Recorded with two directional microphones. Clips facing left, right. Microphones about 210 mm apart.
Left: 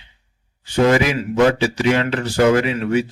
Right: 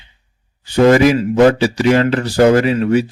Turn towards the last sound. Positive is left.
turn(degrees=-40)  # may be behind; listen again after turning